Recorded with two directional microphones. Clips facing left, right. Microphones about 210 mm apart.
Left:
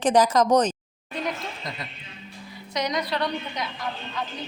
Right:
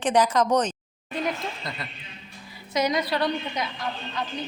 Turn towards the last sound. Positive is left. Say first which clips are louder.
# right 2 dB
turn(degrees=-5)  # may be behind; listen again after turning